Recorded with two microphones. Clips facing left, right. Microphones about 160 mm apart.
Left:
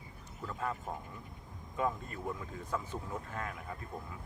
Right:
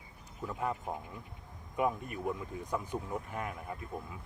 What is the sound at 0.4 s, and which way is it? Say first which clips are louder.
Speech: right 3 dB; 15° right (ahead or behind).